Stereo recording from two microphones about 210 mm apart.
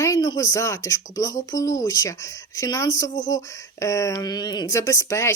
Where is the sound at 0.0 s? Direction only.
15° left (ahead or behind).